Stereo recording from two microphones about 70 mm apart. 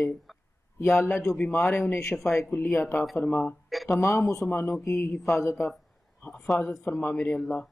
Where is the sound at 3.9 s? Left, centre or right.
Left.